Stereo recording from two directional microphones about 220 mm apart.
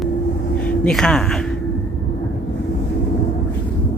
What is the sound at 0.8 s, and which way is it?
Speech, 5° left (ahead or behind).